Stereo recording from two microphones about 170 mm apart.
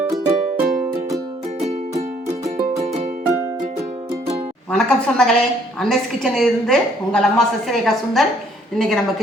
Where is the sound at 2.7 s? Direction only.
40° right (ahead or behind).